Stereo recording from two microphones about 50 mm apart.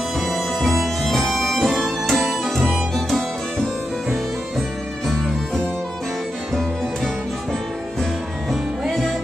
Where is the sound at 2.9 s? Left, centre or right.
Centre.